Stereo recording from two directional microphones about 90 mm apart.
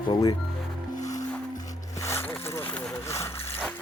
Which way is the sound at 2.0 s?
30° left (ahead or behind).